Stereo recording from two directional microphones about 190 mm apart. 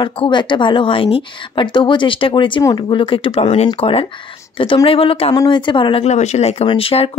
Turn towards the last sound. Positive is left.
turn(degrees=30)  # may be behind; listen again after turning